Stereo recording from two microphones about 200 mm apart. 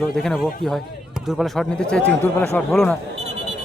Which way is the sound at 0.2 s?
Centre (ahead or behind).